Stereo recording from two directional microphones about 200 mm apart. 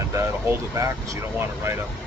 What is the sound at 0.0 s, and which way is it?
Speech, 15° right (ahead or behind).